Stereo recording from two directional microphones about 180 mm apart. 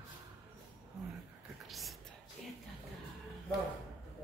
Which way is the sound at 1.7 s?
Centre (ahead or behind).